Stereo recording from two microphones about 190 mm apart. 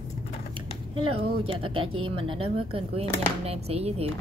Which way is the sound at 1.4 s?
30° right (ahead or behind).